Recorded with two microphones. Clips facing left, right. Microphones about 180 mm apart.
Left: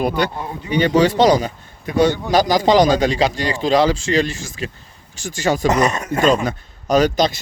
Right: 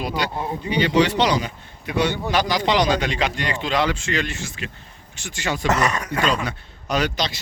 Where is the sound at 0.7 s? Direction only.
45° left (ahead or behind).